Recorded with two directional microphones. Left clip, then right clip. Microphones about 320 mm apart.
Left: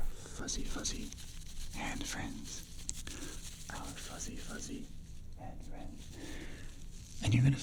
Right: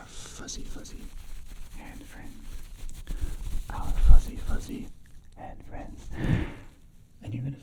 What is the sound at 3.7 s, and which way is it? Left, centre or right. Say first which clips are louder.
Speech: right 7 dB; centre.